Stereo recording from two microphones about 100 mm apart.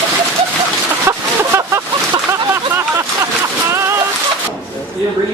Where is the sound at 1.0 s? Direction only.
25° right (ahead or behind).